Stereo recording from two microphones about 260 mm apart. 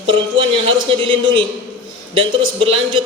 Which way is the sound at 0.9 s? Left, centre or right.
Centre.